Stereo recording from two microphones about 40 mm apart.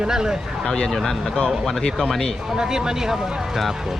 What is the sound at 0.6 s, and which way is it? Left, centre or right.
Speech, centre.